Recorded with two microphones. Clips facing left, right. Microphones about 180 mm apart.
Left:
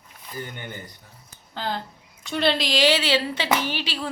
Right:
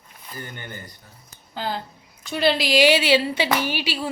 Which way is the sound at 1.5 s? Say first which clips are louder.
Right 1 dB; 5° right (ahead or behind).